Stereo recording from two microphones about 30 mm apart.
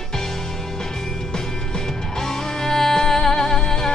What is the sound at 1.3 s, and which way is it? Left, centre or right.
Music, centre.